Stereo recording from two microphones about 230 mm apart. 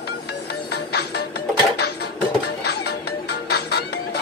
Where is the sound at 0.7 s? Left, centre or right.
Left.